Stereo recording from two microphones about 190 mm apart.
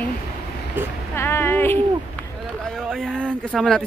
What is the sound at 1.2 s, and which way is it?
A man's voice, 15° left (ahead or behind).